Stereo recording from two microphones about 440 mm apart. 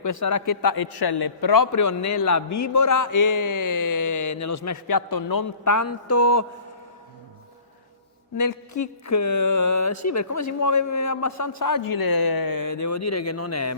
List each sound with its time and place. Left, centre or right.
0.0 s a man's voice: left
8.4 s a man's voice: left